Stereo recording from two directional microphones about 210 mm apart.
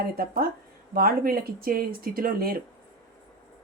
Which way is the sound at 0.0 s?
45° right (ahead or behind).